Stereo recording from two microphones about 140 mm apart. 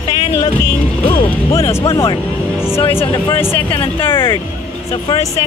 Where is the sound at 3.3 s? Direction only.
15° left (ahead or behind).